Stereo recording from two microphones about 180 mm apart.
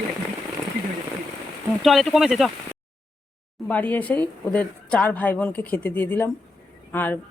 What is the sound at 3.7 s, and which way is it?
A woman's voice, 10° left (ahead or behind).